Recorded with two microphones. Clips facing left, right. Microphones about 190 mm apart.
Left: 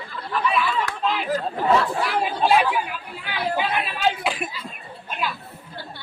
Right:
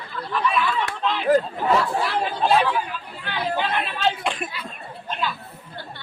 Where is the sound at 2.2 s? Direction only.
10° left (ahead or behind).